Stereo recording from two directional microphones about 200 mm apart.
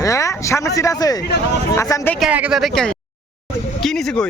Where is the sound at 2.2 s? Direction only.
5° right (ahead or behind).